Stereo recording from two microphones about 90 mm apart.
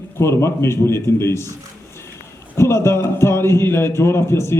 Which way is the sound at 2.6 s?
30° left (ahead or behind).